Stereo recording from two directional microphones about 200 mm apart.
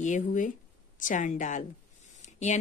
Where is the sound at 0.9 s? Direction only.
40° left (ahead or behind).